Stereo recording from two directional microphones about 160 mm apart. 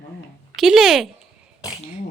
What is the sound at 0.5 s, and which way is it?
Speech, centre (ahead or behind).